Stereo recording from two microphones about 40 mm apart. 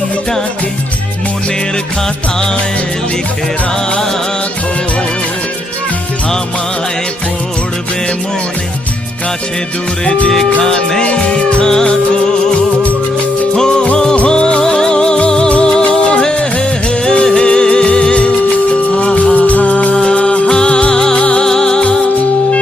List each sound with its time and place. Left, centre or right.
10.1 s music: left
10.6 s music: centre
11.0 s music: left
11.6 s music: centre
13.6 s music: centre
16.3 s music of bollywood: left
17.2 s music: left
20.5 s music: left
21.4 s music: centre